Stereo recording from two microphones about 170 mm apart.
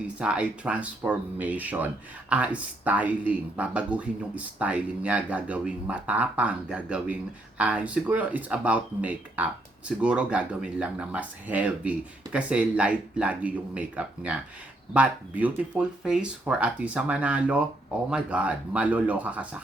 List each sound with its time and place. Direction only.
0.2 s speech: 5° right (ahead or behind)